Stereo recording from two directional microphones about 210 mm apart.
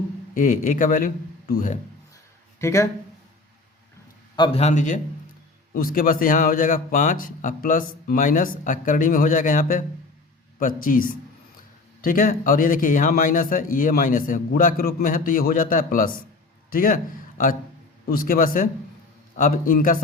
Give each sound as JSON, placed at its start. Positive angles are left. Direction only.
{"t": 0.3, "sound": "a man's voice", "side_deg": 40}
{"t": 2.6, "sound": "speech", "side_deg": 15}
{"t": 4.4, "sound": "a man's voice", "side_deg": 25}
{"t": 18.1, "sound": "a man's voice", "side_deg": 45}